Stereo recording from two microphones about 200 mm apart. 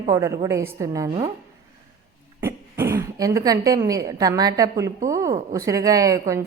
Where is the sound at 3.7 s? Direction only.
15° right (ahead or behind).